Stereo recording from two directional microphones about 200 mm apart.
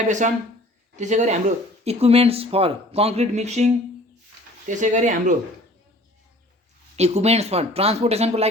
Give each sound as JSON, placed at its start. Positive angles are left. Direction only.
{"t": 0.2, "sound": "speech", "side_deg": -35}
{"t": 6.9, "sound": "speech", "side_deg": -30}